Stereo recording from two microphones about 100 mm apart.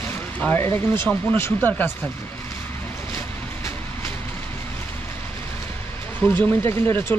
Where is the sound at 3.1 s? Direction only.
30° left (ahead or behind).